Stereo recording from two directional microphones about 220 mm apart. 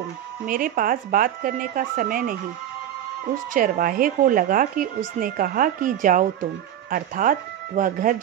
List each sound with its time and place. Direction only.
0.5 s a woman's voice: 40° right (ahead or behind)
3.5 s a woman's voice: 40° right (ahead or behind)